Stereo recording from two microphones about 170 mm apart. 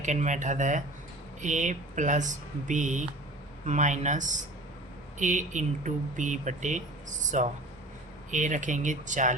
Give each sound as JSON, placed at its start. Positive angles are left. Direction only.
{"t": 0.0, "sound": "speech", "side_deg": -45}